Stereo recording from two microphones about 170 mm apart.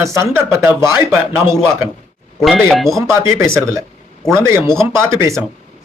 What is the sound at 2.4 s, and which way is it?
Speech, centre (ahead or behind).